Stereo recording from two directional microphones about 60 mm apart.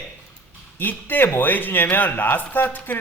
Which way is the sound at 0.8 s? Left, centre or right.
Left.